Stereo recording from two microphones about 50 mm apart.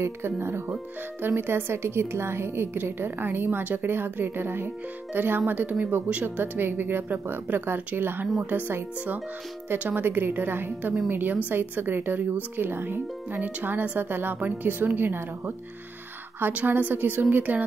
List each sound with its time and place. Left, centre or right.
0.0 s a woman's voice: right
8.4 s speech: right
9.7 s a woman's voice: right
16.5 s speech: right